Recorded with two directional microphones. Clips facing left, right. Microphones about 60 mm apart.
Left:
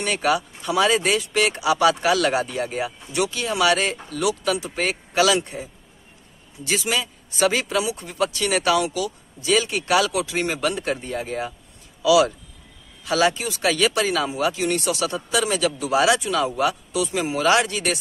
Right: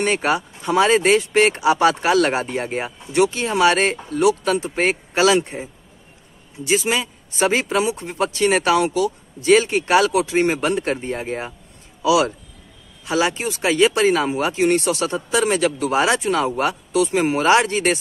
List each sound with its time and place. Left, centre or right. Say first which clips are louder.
0.0 s a man's voice: right 2 dB; right